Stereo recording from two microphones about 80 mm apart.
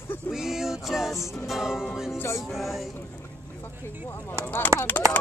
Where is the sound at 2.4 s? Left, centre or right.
Centre.